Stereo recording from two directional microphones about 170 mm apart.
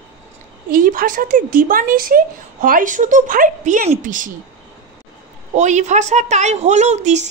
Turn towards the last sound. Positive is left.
turn(degrees=-40)  # may be behind; listen again after turning